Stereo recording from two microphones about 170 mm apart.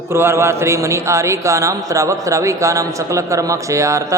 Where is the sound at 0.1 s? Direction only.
15° right (ahead or behind).